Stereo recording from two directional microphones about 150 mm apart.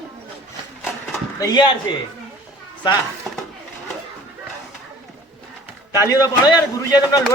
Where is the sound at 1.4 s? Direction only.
30° left (ahead or behind).